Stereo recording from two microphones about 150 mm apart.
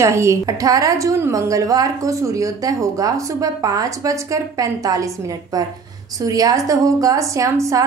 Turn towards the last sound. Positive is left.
turn(degrees=-20)  # may be behind; listen again after turning